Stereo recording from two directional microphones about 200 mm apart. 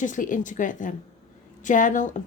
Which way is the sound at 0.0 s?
40° left (ahead or behind).